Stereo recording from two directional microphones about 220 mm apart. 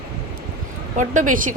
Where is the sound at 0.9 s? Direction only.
35° right (ahead or behind).